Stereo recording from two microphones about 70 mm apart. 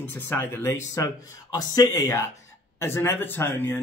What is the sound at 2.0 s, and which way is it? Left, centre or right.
Speech, left.